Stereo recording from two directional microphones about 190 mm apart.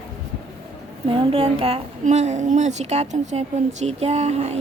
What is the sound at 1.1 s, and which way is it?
A woman's voice, 25° right (ahead or behind).